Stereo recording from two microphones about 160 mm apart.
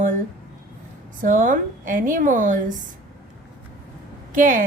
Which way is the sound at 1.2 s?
55° right (ahead or behind).